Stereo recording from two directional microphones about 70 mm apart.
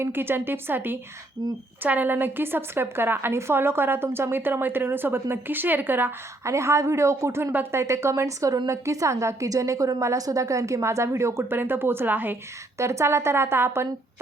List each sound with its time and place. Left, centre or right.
0.0 s a woman's voice: right
6.4 s a woman's voice: right
12.7 s a woman's voice: right